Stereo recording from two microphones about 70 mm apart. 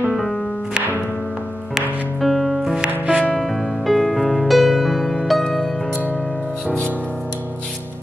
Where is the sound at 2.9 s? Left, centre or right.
Centre.